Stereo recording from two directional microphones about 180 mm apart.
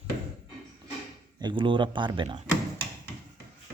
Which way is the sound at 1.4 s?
25° right (ahead or behind).